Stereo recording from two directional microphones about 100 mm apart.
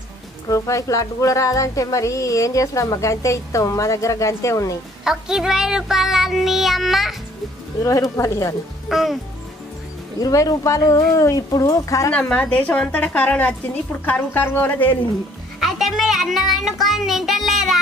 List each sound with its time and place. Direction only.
0.5 s speech: 35° left (ahead or behind)
5.0 s music: 5° right (ahead or behind)
7.8 s speech: 35° left (ahead or behind)
8.8 s music: centre (ahead or behind)
10.2 s speech: 35° left (ahead or behind)
12.1 s a woman's voice: 15° left (ahead or behind)
15.6 s music: centre (ahead or behind)